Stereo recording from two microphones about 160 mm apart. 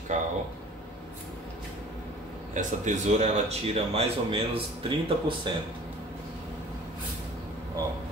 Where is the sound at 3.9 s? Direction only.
35° right (ahead or behind).